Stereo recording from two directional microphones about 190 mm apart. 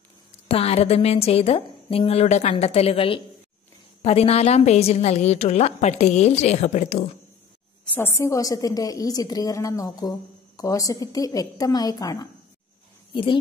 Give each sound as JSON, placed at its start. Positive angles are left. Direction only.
{"t": 0.5, "sound": "a woman's voice", "side_deg": 30}
{"t": 7.9, "sound": "a woman's voice", "side_deg": 15}